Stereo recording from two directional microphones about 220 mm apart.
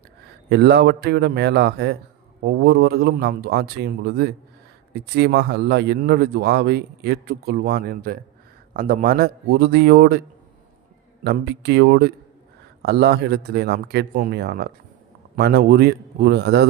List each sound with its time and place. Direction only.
0.5 s speech: 50° right (ahead or behind)
11.2 s speech: 50° right (ahead or behind)